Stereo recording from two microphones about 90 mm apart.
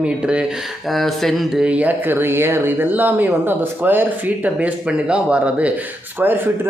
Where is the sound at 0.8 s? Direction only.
Centre (ahead or behind).